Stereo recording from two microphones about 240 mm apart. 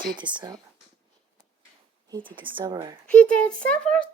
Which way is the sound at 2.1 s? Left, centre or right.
Right.